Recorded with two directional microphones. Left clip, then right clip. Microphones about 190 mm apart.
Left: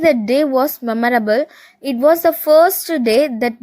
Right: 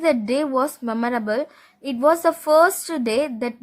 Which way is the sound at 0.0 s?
15° left (ahead or behind).